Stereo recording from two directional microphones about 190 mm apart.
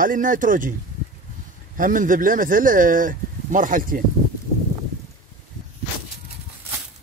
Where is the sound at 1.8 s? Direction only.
45° right (ahead or behind).